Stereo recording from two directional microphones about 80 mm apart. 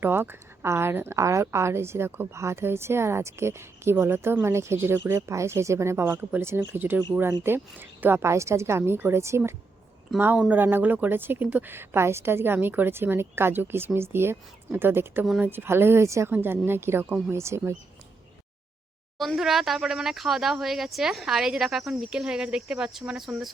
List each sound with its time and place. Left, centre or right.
0.0 s a woman's voice: right
19.2 s speech: centre